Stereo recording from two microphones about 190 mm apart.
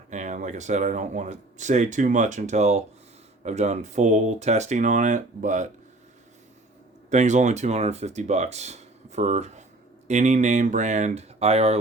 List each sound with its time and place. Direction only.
0.1 s speech: 40° right (ahead or behind)
7.1 s speech: 40° right (ahead or behind)